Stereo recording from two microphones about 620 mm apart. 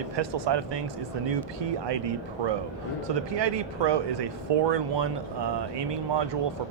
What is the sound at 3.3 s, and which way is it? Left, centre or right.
Speech, right.